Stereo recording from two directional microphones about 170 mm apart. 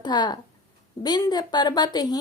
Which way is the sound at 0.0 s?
25° left (ahead or behind).